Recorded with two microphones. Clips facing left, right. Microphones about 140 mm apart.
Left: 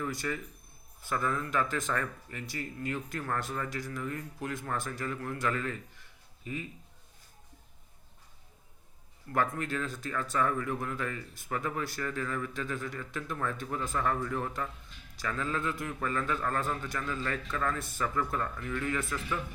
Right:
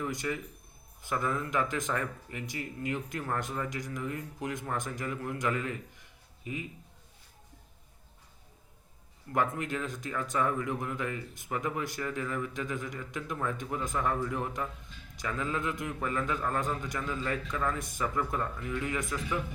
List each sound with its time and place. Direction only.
0.0 s speech: 15° right (ahead or behind)
9.3 s speech: 15° right (ahead or behind)